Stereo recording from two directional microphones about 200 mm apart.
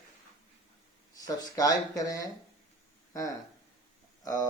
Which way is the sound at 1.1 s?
20° left (ahead or behind).